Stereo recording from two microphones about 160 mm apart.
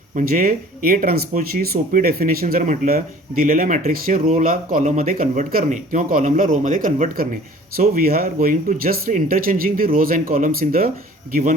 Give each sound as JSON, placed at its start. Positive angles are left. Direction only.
{"t": 0.2, "sound": "speech", "side_deg": -60}